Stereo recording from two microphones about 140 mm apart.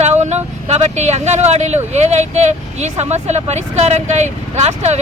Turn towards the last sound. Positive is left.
turn(degrees=-55)  # may be behind; listen again after turning